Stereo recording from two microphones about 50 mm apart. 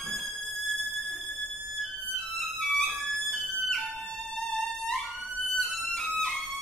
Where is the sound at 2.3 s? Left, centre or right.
Centre.